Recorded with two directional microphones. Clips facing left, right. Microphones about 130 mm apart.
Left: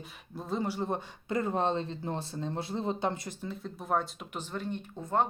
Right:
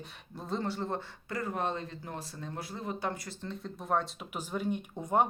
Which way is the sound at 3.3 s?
5° left (ahead or behind).